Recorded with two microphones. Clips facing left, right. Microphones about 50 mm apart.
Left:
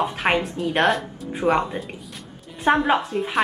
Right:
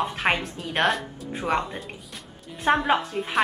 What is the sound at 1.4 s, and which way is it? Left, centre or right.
Speech, right.